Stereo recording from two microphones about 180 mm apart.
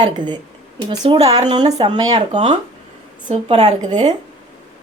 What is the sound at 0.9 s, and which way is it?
Speech, 30° right (ahead or behind).